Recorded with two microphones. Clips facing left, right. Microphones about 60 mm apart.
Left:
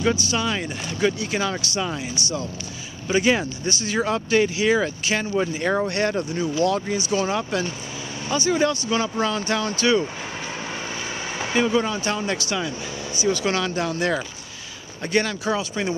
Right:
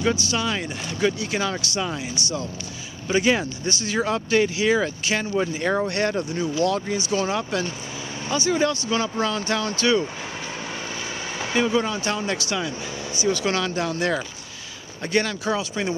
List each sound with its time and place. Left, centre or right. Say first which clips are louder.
0.0 s speech: left 1 dB; centre
10.4 s vehicle: left 1 dB; left
11.5 s speech: left 1 dB; centre